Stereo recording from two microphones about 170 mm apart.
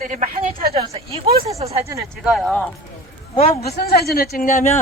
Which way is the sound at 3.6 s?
65° left (ahead or behind).